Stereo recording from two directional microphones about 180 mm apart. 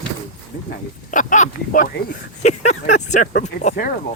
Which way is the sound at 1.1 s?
45° left (ahead or behind).